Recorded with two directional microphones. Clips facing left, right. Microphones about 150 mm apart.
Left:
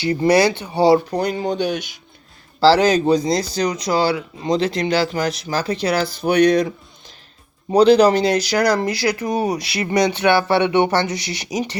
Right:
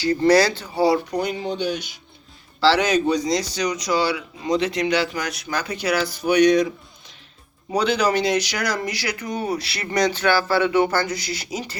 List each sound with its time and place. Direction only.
0.0 s speech: 20° left (ahead or behind); by 1.9 s 50° left (ahead or behind)
2.6 s speech: 35° left (ahead or behind)
4.4 s speech: 30° left (ahead or behind)
7.7 s speech: 35° left (ahead or behind)
9.5 s speech: 20° left (ahead or behind)